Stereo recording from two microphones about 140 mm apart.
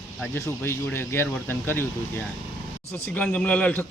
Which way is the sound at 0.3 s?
20° left (ahead or behind).